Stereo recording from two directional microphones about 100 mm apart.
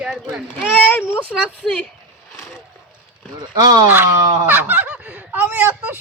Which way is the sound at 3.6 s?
45° right (ahead or behind).